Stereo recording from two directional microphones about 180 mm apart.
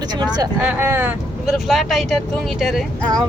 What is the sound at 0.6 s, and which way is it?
Speech, 10° right (ahead or behind).